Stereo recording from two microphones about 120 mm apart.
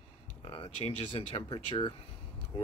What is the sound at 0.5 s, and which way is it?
Speech, 45° left (ahead or behind).